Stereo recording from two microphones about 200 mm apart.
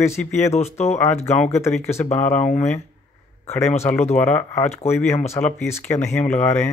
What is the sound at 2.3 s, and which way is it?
Speech, 35° left (ahead or behind).